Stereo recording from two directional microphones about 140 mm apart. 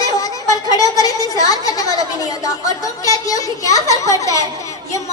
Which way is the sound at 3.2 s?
25° left (ahead or behind).